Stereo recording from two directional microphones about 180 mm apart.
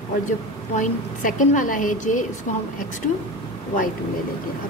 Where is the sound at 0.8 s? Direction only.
45° left (ahead or behind).